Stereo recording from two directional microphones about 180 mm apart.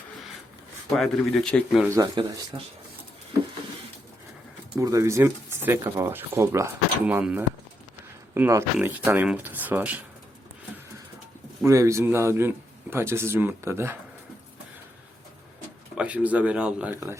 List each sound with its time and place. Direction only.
0.9 s speech: centre (ahead or behind)
1.9 s speech: 20° right (ahead or behind)
4.8 s speech: 20° right (ahead or behind)
11.6 s speech: 15° right (ahead or behind)
16.0 s speech: 10° right (ahead or behind)